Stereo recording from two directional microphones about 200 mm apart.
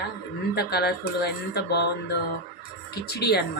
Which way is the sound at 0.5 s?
55° left (ahead or behind).